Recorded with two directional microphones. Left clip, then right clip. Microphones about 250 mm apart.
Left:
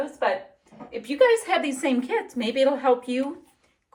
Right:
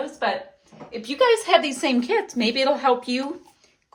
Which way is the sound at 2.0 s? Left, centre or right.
Centre.